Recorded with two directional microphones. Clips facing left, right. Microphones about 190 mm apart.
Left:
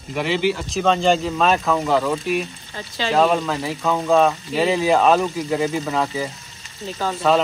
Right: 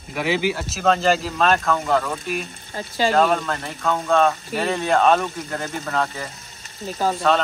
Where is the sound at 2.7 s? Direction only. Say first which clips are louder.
Right 4 dB; 45° right (ahead or behind).